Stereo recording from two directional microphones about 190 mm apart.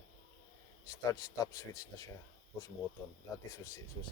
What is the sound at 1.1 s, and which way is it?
Speech, 20° left (ahead or behind).